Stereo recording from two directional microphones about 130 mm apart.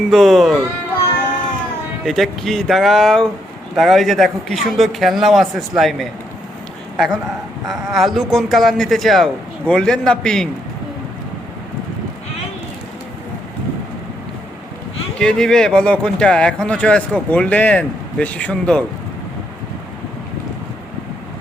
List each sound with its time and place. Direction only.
0.1 s speech: centre (ahead or behind)
2.0 s speech: centre (ahead or behind)
15.2 s speech: 5° left (ahead or behind)